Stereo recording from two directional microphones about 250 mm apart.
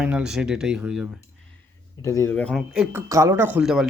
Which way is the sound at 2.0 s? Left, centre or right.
Centre.